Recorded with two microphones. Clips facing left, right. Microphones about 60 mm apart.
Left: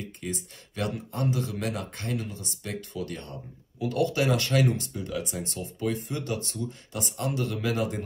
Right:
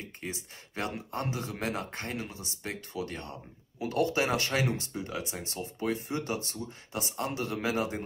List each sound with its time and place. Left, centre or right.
0.2 s speech: right